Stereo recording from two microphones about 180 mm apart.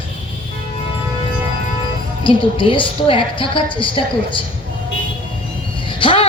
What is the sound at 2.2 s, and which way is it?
A woman's voice, 30° left (ahead or behind).